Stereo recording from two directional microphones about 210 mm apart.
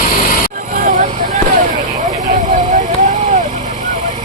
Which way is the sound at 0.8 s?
35° right (ahead or behind).